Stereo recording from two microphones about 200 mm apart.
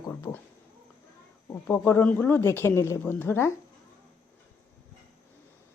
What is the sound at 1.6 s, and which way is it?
Speech, 10° left (ahead or behind).